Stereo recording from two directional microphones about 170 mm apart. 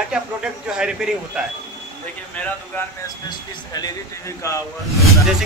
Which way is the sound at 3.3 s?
25° left (ahead or behind).